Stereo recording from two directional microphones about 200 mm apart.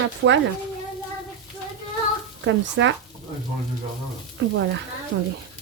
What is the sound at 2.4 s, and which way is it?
Speech, 70° right (ahead or behind).